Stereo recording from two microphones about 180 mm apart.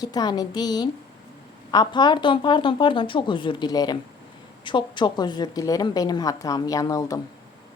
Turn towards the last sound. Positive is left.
turn(degrees=20)  # may be behind; listen again after turning